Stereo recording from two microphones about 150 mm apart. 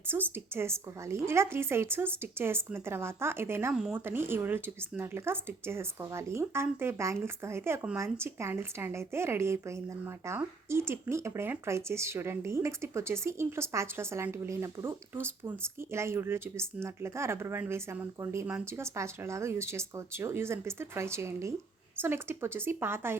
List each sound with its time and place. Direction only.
0.1 s speech: 15° right (ahead or behind)
3.7 s speech: 5° right (ahead or behind)